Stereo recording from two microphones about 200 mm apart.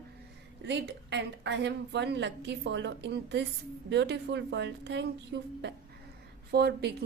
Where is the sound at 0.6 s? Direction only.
60° right (ahead or behind).